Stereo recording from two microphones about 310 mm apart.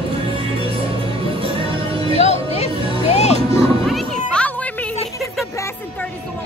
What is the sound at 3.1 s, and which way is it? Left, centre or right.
Music, centre.